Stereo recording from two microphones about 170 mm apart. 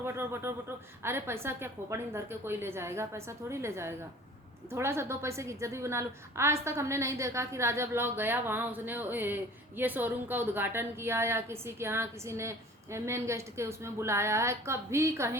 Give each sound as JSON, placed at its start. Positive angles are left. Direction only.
{"t": 0.0, "sound": "a woman's voice", "side_deg": -15}